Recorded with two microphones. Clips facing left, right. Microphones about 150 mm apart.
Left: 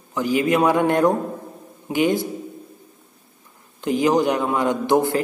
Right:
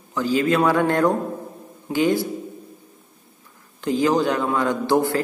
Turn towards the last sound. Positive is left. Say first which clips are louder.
# left 1 dB
turn(degrees=20)  # may be behind; listen again after turning